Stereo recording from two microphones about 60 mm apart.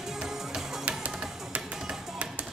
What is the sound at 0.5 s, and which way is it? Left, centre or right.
Music, right.